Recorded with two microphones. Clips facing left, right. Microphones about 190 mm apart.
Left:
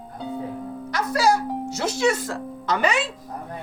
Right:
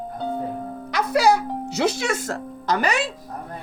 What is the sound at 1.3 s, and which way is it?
Speech, 60° right (ahead or behind).